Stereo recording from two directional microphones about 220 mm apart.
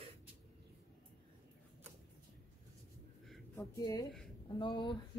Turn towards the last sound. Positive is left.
turn(degrees=20)  # may be behind; listen again after turning